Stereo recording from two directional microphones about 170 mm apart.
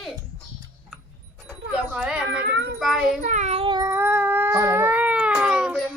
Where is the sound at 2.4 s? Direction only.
75° right (ahead or behind).